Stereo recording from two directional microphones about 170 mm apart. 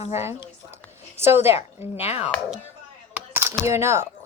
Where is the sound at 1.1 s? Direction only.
15° right (ahead or behind).